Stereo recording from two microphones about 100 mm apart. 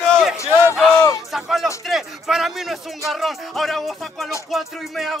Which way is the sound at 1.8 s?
Centre (ahead or behind).